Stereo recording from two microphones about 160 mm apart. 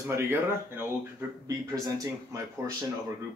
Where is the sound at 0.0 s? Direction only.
15° right (ahead or behind).